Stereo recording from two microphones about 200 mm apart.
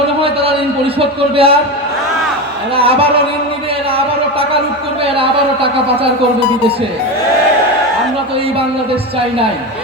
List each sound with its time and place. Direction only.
0.9 s a man's voice: 30° right (ahead or behind)
2.7 s a man's voice: 30° right (ahead or behind)
5.0 s a man's voice: 30° right (ahead or behind)